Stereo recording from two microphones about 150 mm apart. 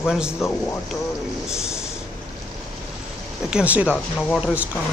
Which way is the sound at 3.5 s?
5° right (ahead or behind).